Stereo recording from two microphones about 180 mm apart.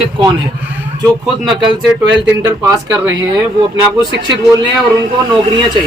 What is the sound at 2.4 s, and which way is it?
Speech, 20° right (ahead or behind).